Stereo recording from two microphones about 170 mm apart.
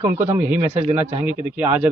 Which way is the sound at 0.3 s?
10° right (ahead or behind).